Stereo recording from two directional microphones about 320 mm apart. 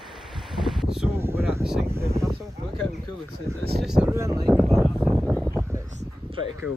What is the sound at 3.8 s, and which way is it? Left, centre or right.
Speech, centre.